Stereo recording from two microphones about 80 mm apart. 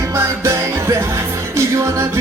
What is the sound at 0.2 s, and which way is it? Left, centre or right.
Music, right.